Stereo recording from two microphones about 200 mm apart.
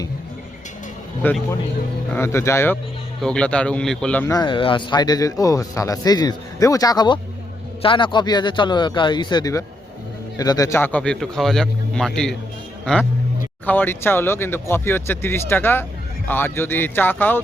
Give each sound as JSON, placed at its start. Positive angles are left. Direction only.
{"t": 1.2, "sound": "a man's voice", "side_deg": 10}
{"t": 4.4, "sound": "a man's voice", "side_deg": 25}